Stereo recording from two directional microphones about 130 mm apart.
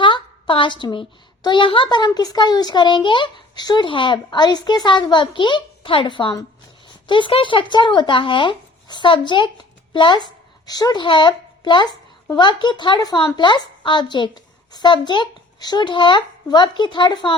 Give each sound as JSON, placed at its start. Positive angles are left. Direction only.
{"t": 0.0, "sound": "a woman's voice", "side_deg": 40}